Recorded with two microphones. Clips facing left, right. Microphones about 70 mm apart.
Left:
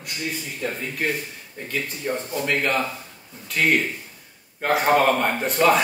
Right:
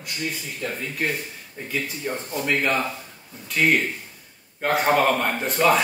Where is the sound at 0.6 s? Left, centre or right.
Left.